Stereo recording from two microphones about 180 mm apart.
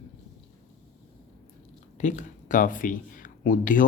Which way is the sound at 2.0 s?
45° left (ahead or behind).